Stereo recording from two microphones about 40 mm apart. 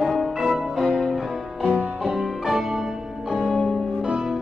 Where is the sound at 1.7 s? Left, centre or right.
Right.